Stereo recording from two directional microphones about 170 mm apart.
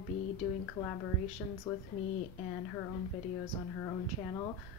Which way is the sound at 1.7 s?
15° left (ahead or behind).